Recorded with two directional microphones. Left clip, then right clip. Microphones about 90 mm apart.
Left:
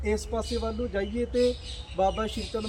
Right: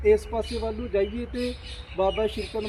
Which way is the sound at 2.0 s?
45° left (ahead or behind).